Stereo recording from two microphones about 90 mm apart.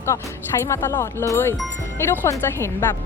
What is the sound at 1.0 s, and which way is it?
Speech, 30° left (ahead or behind).